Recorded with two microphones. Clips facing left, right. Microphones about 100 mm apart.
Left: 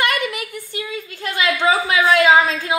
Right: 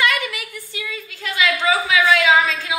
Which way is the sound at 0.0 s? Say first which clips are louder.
Left 1 dB; 45° left (ahead or behind).